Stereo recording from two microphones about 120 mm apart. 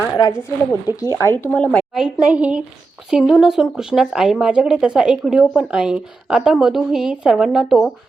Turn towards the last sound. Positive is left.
turn(degrees=-5)  # may be behind; listen again after turning